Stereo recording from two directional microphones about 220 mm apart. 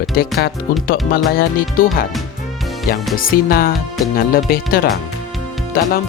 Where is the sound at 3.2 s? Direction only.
40° left (ahead or behind).